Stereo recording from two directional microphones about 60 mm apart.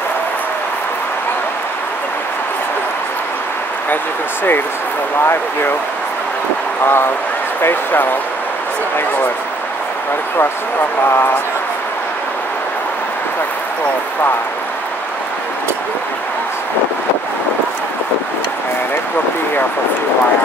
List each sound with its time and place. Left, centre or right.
6.8 s speech: left
11.0 s speech: left